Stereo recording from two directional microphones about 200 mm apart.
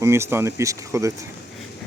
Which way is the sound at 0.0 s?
15° right (ahead or behind).